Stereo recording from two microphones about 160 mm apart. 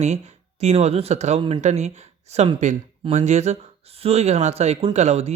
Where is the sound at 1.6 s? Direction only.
45° right (ahead or behind).